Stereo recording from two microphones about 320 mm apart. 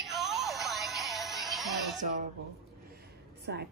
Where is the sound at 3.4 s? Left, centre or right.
Right.